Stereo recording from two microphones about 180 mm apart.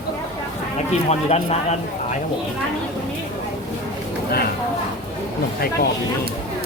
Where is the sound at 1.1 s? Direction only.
35° left (ahead or behind).